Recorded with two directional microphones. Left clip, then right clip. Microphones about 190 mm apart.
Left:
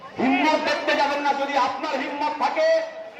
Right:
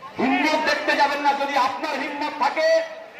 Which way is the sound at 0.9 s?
30° left (ahead or behind).